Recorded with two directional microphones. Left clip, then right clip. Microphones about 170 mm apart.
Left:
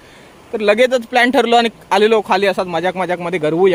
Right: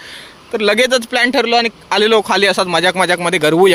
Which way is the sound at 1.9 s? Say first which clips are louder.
Right 1 dB; 10° left (ahead or behind).